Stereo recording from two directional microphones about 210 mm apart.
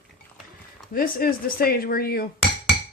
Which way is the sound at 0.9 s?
45° left (ahead or behind).